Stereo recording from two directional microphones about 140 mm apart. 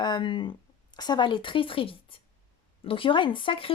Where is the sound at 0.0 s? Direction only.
35° left (ahead or behind).